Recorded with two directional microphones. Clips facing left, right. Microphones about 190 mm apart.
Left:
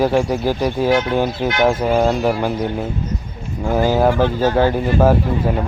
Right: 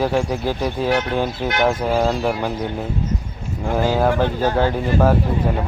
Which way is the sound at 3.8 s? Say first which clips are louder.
Left 3 dB; 5° left (ahead or behind).